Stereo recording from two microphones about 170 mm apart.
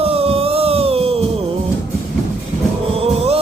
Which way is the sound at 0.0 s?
35° right (ahead or behind).